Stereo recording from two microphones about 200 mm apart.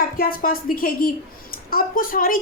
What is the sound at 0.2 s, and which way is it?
A woman's voice, 45° left (ahead or behind).